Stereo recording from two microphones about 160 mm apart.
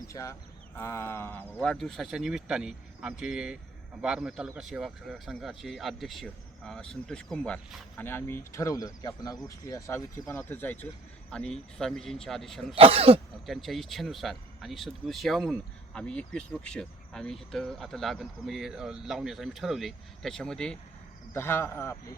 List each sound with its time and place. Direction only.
0.1 s speech: 20° left (ahead or behind); by 12.6 s centre (ahead or behind)
12.7 s speech: 35° right (ahead or behind)
13.5 s speech: centre (ahead or behind)
21.3 s a man's voice: 15° left (ahead or behind)